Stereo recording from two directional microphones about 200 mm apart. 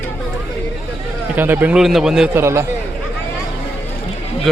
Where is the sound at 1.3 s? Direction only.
10° right (ahead or behind).